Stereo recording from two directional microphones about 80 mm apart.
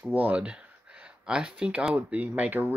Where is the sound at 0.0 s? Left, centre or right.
Centre.